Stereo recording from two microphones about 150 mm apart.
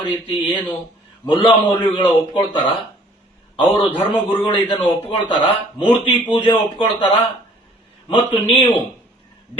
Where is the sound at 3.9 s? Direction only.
15° left (ahead or behind).